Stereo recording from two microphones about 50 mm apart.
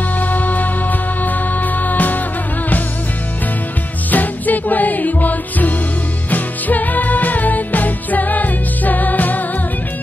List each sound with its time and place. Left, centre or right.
0.2 s music: left
4.1 s music: left